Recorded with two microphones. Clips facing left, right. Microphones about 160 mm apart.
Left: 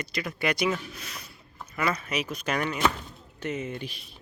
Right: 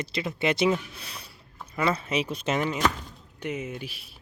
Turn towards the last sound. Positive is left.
turn(degrees=-5)  # may be behind; listen again after turning